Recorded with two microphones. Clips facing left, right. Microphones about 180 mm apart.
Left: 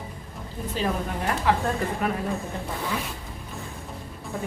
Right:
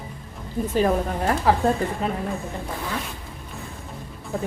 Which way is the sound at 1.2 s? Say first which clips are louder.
Right 3 dB; 35° right (ahead or behind).